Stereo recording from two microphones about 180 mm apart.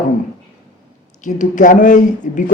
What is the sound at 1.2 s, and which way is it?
Speech, 45° left (ahead or behind).